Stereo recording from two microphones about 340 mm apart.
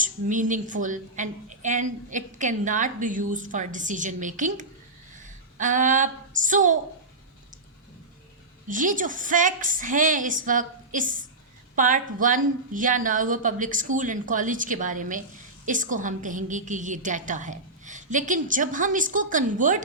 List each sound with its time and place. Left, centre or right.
0.0 s a woman's voice: right
8.6 s a woman's voice: right